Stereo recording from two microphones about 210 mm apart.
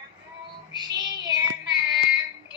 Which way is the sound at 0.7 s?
20° right (ahead or behind).